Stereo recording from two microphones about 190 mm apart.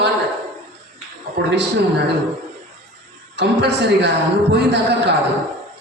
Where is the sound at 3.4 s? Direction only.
65° right (ahead or behind).